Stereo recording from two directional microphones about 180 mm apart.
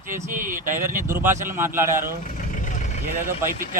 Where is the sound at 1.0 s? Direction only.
15° right (ahead or behind).